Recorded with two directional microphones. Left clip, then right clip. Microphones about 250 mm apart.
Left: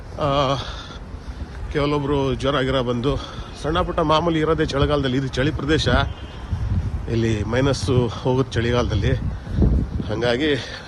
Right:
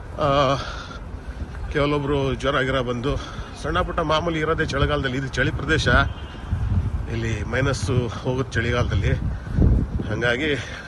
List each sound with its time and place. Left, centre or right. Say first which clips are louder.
0.2 s a man's voice: right 1 dB; centre
1.7 s a man's voice: left 1 dB; centre
7.1 s a man's voice: left 5 dB; centre